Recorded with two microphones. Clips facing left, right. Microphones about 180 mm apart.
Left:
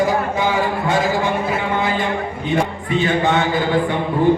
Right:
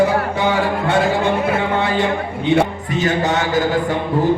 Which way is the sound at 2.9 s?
40° right (ahead or behind).